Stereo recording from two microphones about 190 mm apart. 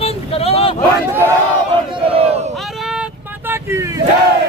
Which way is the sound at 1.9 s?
30° right (ahead or behind).